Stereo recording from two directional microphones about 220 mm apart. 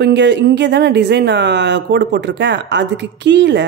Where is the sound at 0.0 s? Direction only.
50° right (ahead or behind).